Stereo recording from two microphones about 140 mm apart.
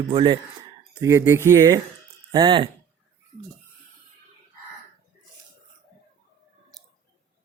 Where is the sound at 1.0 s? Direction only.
20° right (ahead or behind).